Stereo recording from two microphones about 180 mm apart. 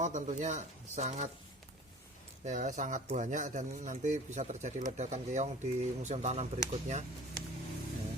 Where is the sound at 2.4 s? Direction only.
40° right (ahead or behind).